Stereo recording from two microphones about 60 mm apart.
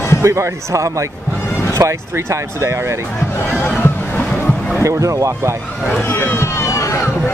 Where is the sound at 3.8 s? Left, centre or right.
Left.